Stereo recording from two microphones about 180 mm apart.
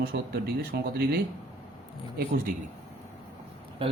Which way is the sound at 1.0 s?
60° right (ahead or behind).